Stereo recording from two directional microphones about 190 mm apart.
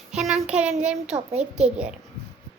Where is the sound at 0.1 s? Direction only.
5° right (ahead or behind).